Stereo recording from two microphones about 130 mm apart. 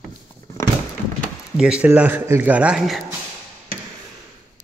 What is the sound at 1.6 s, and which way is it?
Speech, 5° right (ahead or behind).